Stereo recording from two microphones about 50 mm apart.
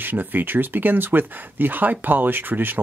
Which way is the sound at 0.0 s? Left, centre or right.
Right.